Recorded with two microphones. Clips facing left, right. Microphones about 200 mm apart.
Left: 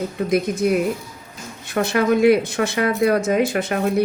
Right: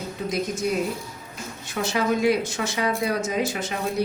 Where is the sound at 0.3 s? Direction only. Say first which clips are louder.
Left 6 dB; 60° left (ahead or behind).